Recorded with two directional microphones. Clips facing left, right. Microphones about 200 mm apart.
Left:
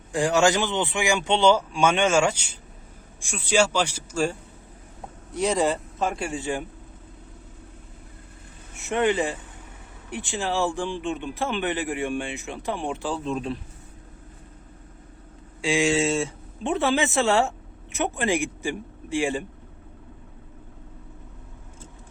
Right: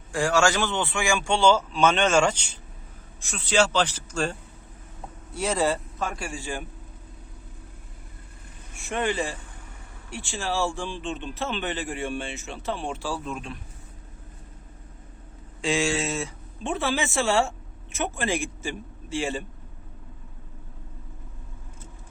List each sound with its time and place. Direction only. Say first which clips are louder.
0.1 s a man's voice: left 2 dB; 20° left (ahead or behind)
8.7 s a man's voice: left 5 dB; 20° left (ahead or behind)
13.2 s speech: left 6 dB; 35° left (ahead or behind)
15.6 s a man's voice: left 3 dB; 15° left (ahead or behind)